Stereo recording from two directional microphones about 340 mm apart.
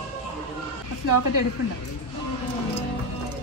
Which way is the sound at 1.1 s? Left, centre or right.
Left.